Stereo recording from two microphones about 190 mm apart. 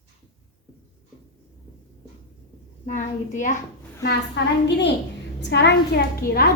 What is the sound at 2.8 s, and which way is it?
Speech, 40° left (ahead or behind).